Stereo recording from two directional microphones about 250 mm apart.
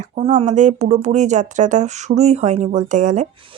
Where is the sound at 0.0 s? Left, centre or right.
Right.